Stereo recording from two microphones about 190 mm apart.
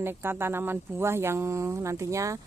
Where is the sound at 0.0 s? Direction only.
10° right (ahead or behind).